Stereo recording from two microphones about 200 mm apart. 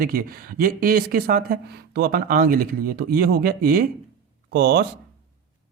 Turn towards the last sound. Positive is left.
turn(degrees=-55)  # may be behind; listen again after turning